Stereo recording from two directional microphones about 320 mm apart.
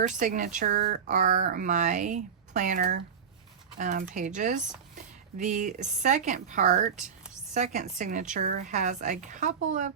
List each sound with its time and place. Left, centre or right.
0.0 s speech: right